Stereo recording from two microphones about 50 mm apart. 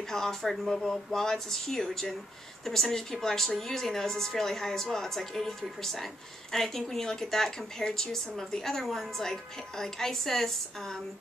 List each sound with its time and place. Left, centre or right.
0.1 s a woman's voice: centre